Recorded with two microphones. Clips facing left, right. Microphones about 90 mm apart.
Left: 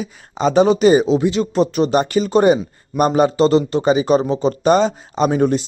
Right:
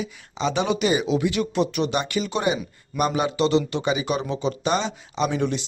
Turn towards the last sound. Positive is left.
turn(degrees=45)  # may be behind; listen again after turning